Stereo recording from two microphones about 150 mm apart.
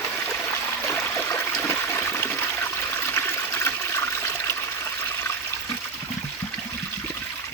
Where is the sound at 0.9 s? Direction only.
15° left (ahead or behind).